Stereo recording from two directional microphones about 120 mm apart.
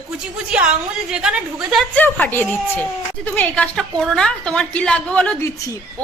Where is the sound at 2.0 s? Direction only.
15° left (ahead or behind).